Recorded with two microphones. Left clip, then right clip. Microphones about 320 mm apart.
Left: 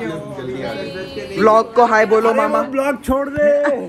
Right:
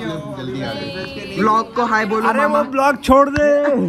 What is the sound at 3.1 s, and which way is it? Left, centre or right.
Speech, right.